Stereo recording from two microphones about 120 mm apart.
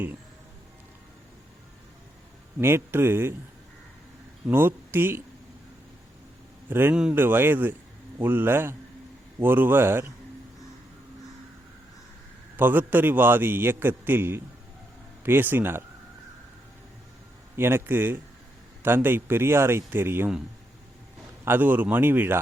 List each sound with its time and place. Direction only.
2.6 s speech: 20° right (ahead or behind)
4.4 s speech: 20° right (ahead or behind)
6.7 s a man's voice: 15° right (ahead or behind)
12.5 s a man's voice: 15° right (ahead or behind)
17.6 s a man's voice: 20° right (ahead or behind)
21.4 s a man's voice: 15° right (ahead or behind)